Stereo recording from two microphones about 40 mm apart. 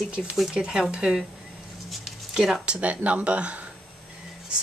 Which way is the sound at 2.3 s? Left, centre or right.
Centre.